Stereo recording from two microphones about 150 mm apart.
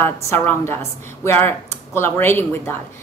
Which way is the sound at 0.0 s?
15° left (ahead or behind).